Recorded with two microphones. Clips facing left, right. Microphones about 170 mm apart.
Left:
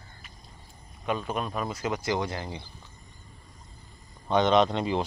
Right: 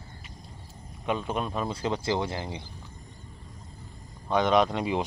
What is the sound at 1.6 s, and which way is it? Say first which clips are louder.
Speech: right 1 dB; 30° right (ahead or behind).